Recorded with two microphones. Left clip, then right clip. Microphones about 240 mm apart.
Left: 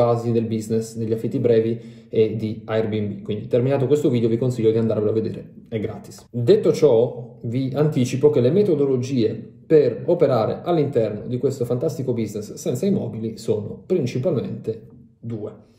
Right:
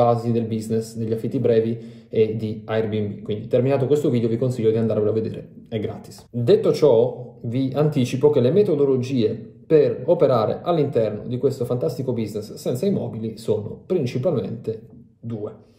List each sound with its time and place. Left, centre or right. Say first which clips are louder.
0.0 s speech: even; centre